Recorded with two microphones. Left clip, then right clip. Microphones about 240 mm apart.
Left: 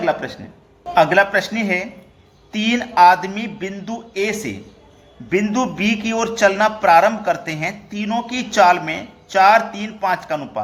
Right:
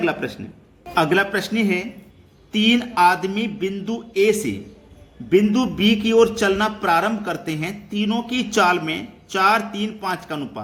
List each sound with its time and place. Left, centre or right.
0.0 s a man's voice: centre